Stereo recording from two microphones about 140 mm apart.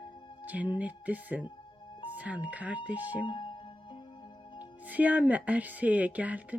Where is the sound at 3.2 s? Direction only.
35° left (ahead or behind).